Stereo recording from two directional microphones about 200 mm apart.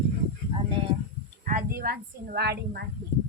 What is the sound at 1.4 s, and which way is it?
A woman's voice, 45° right (ahead or behind).